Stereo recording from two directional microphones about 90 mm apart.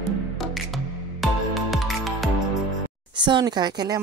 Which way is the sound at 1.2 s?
Centre (ahead or behind).